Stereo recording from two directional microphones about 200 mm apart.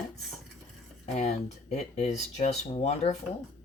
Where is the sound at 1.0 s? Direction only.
35° left (ahead or behind).